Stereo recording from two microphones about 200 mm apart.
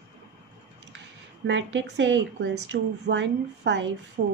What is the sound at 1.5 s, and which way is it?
Speech, 70° right (ahead or behind).